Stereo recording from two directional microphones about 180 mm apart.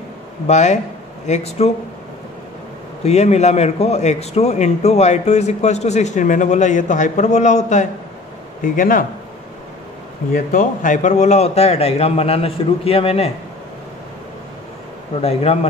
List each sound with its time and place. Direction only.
0.5 s a man's voice: 40° left (ahead or behind)
3.0 s a man's voice: 35° left (ahead or behind)
10.3 s a man's voice: 50° left (ahead or behind)
15.2 s a man's voice: 35° left (ahead or behind)